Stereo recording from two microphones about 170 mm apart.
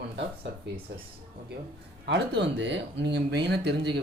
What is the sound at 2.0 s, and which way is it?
Speech, 90° right.